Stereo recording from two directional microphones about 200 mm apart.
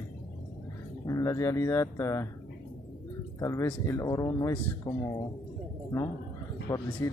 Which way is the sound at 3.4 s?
15° left (ahead or behind).